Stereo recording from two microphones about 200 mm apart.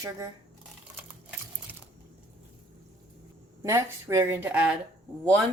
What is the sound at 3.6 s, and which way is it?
A woman's voice, 15° right (ahead or behind).